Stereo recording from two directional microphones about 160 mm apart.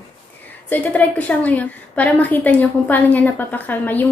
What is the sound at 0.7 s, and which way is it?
A woman's voice, 10° left (ahead or behind).